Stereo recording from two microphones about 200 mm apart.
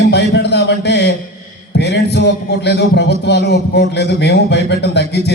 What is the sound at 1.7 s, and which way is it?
A man's voice, 55° left (ahead or behind).